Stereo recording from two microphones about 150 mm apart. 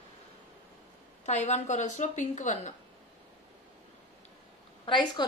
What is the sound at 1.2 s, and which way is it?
A woman's voice, 50° left (ahead or behind).